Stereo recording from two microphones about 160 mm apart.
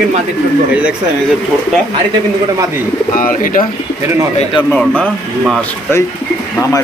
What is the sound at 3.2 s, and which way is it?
Speech, 60° left (ahead or behind).